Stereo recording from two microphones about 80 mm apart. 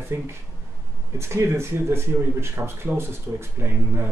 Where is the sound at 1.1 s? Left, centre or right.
Right.